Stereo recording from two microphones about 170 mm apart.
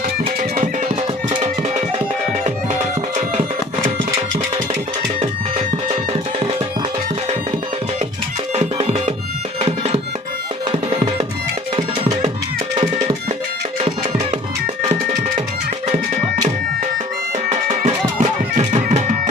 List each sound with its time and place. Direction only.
0.3 s music: 40° right (ahead or behind)
8.5 s music: 35° right (ahead or behind)
17.5 s music: 45° right (ahead or behind)